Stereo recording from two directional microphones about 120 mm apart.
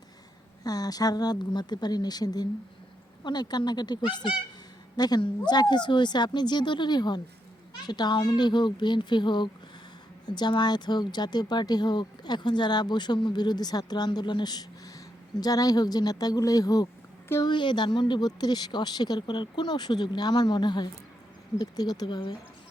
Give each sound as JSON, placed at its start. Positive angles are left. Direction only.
{"t": 0.6, "sound": "speech", "side_deg": 30}